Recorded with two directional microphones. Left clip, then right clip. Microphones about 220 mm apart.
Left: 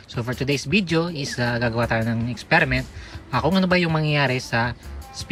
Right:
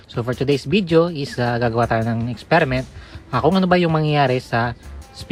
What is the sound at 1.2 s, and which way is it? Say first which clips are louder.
Speech: right 3 dB; 5° left (ahead or behind).